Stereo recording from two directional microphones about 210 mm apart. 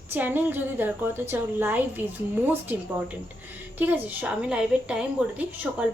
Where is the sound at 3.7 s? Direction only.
10° right (ahead or behind).